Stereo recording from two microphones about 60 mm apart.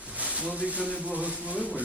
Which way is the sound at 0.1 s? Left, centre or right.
Right.